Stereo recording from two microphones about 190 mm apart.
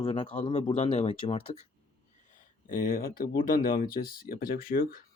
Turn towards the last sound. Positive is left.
turn(degrees=50)  # may be behind; listen again after turning